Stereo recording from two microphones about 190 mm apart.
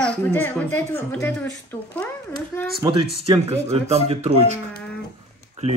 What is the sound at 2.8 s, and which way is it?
Speech, 25° right (ahead or behind).